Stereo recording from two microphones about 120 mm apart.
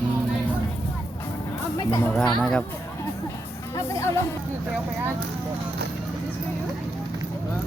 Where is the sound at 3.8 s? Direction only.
25° left (ahead or behind).